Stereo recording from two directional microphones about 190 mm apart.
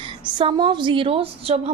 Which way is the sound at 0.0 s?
25° right (ahead or behind).